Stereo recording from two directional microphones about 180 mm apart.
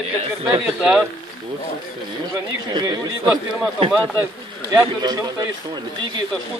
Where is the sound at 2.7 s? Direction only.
20° right (ahead or behind).